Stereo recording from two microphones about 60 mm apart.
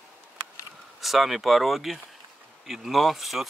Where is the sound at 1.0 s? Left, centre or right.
Centre.